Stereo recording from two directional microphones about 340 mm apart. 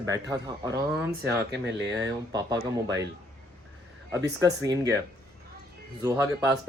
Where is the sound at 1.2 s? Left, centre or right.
Right.